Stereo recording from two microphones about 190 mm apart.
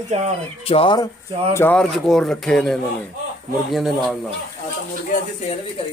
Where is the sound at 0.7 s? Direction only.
25° left (ahead or behind).